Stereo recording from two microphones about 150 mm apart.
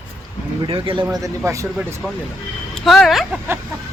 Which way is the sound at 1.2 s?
20° right (ahead or behind).